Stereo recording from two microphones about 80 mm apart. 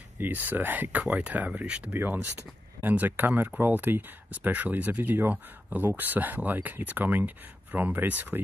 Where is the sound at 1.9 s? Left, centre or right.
Right.